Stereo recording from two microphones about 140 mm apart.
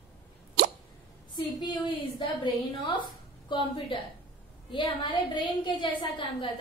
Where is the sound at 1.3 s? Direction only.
35° left (ahead or behind).